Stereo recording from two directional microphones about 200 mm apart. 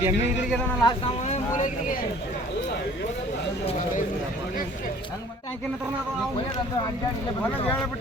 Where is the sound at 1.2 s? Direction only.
35° left (ahead or behind).